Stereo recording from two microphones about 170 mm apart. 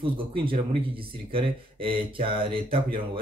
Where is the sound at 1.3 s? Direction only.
30° right (ahead or behind).